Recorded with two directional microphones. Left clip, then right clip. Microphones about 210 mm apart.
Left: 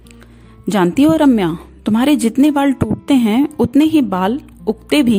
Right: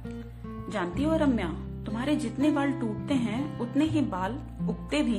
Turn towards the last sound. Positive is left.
turn(degrees=45)  # may be behind; listen again after turning